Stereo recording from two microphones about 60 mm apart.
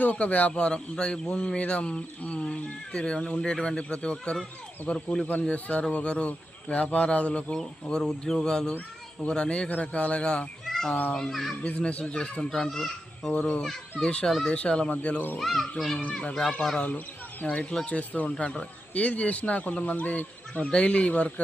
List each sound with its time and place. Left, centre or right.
0.0 s speech: left
10.7 s cat: centre
11.1 s speech: centre
11.6 s speech: centre
13.3 s speech: centre
15.4 s speech: centre
16.3 s speech: centre